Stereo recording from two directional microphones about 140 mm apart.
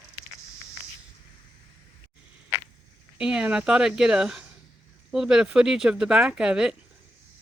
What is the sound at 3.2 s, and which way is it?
Speech, 5° right (ahead or behind).